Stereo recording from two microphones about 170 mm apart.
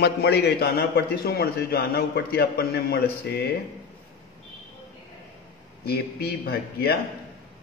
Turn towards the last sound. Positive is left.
turn(degrees=65)  # may be behind; listen again after turning